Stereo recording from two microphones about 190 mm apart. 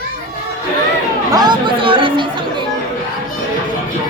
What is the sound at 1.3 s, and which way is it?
Speech, 20° right (ahead or behind).